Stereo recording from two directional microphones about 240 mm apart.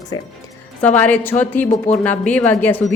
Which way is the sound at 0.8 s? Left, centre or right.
Centre.